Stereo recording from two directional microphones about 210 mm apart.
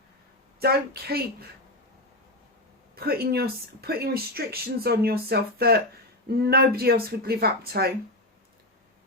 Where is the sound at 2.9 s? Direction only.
45° right (ahead or behind).